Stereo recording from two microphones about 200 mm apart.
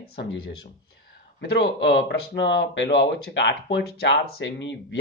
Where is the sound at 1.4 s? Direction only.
60° left (ahead or behind).